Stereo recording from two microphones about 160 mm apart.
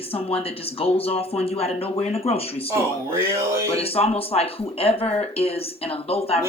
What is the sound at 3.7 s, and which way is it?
Speech, 40° left (ahead or behind).